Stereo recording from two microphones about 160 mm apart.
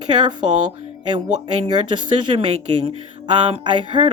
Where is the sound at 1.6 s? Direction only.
30° right (ahead or behind).